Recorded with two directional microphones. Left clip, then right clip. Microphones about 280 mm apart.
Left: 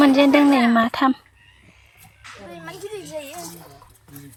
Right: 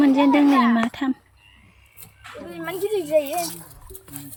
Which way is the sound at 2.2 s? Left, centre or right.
Right.